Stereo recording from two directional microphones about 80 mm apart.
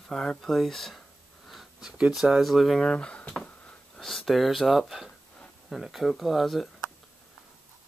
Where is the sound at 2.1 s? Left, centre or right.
Centre.